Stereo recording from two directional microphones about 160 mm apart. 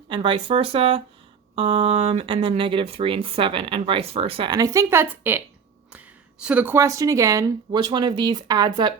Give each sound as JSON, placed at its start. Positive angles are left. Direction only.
{"t": 0.1, "sound": "speech", "side_deg": -30}
{"t": 4.5, "sound": "speech", "side_deg": -20}